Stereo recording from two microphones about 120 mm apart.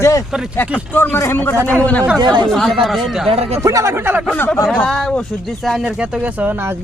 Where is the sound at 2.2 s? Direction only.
40° right (ahead or behind).